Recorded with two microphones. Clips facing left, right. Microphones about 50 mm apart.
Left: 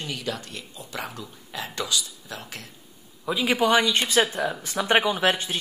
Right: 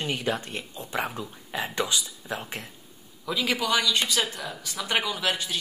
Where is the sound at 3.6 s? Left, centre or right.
Left.